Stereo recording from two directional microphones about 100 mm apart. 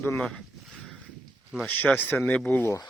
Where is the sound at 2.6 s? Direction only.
30° left (ahead or behind).